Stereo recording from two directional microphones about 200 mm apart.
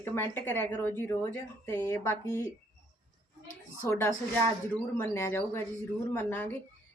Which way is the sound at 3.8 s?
10° left (ahead or behind).